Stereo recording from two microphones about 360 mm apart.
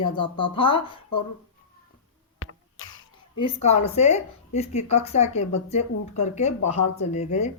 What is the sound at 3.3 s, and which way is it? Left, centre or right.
Speech, centre.